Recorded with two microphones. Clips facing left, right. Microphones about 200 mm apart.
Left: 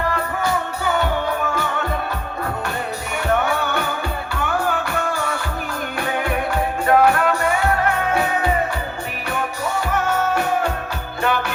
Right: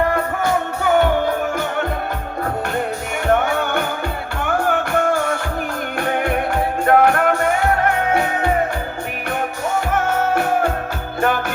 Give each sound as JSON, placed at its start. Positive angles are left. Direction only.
{"t": 0.1, "sound": "music", "side_deg": -50}
{"t": 3.2, "sound": "music", "side_deg": -50}
{"t": 9.7, "sound": "music", "side_deg": -50}